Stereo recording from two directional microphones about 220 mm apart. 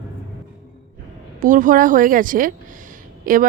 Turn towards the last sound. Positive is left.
turn(degrees=-40)  # may be behind; listen again after turning